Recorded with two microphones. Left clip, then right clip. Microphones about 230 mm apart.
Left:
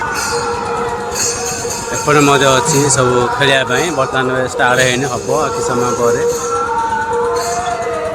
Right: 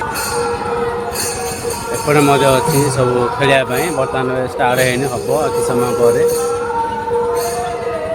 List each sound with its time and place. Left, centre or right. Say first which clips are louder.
2.0 s a man's voice: left 1 dB; centre